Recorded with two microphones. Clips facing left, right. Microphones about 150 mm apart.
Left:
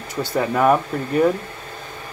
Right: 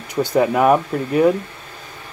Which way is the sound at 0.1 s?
15° right (ahead or behind).